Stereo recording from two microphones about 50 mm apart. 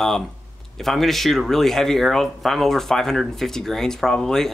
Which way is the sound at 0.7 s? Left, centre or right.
Centre.